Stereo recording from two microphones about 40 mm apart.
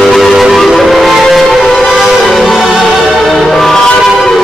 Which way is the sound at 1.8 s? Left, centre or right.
Centre.